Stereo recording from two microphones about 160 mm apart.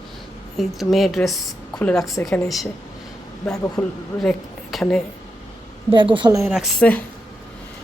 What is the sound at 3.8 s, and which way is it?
A woman's voice, 5° left (ahead or behind).